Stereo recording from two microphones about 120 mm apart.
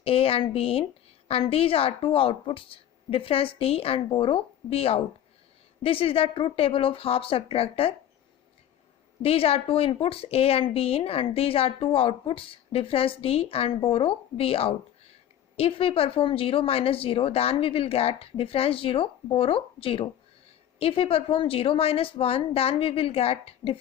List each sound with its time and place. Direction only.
0.0 s a woman's voice: 55° left (ahead or behind)
9.2 s a woman's voice: 55° left (ahead or behind)